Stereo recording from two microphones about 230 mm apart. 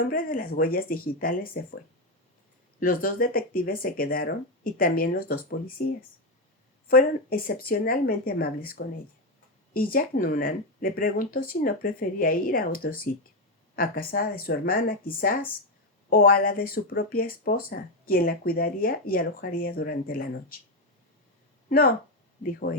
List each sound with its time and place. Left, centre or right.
0.0 s speech: left
2.8 s speech: left
21.7 s speech: left